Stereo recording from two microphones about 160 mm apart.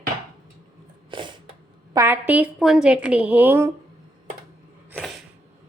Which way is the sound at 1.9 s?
15° right (ahead or behind).